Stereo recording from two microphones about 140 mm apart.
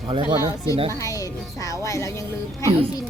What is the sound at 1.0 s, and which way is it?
Speech, 25° left (ahead or behind).